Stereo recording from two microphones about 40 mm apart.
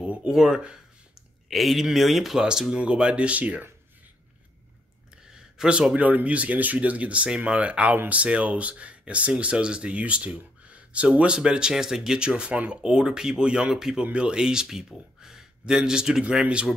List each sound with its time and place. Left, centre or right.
0.0 s a sound: right
0.3 s speech: centre
1.5 s speech: centre
2.3 s speech: centre
2.8 s speech: right
5.6 s speech: centre
5.9 s speech: right